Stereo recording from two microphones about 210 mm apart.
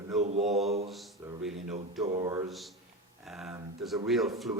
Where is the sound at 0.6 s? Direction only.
30° right (ahead or behind).